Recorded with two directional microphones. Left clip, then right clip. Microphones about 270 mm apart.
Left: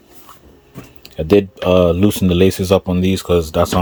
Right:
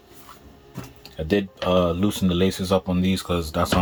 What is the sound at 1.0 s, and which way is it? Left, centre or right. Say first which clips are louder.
Speech: left 10 dB; left.